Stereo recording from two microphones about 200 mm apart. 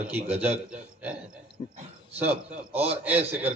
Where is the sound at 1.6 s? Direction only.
20° left (ahead or behind).